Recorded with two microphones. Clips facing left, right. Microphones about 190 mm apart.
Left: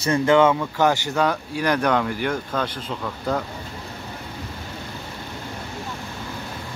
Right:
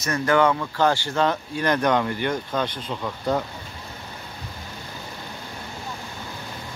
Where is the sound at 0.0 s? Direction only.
25° left (ahead or behind); by 3.0 s 5° left (ahead or behind).